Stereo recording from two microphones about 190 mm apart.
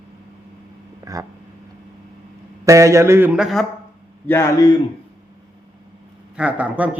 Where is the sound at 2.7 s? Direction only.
15° right (ahead or behind).